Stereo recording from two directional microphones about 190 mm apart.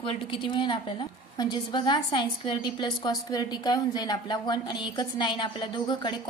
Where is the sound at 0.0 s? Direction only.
30° left (ahead or behind).